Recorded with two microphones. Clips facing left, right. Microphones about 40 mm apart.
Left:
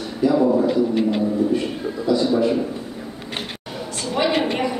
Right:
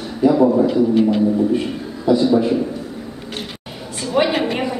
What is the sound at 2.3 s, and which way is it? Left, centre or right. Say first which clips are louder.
Speech: right 3 dB; centre.